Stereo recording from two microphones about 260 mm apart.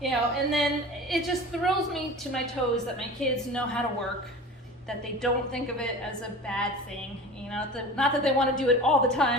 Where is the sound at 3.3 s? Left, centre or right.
Centre.